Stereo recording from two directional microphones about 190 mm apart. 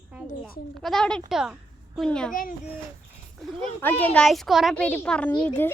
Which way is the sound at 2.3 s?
45° left (ahead or behind).